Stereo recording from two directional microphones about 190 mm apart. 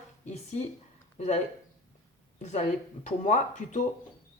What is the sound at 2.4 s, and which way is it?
Speech, 40° left (ahead or behind).